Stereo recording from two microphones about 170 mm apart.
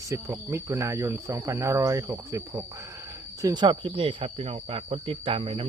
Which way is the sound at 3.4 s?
25° right (ahead or behind).